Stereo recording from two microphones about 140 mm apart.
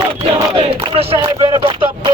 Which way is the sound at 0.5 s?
35° right (ahead or behind).